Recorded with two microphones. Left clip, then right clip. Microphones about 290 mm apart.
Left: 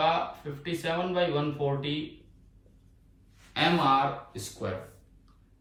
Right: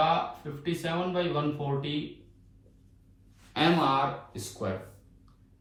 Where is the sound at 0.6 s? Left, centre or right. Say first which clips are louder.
Left 1 dB; centre.